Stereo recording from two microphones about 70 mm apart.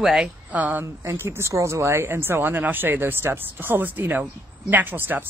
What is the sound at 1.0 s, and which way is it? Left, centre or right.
Speech, right.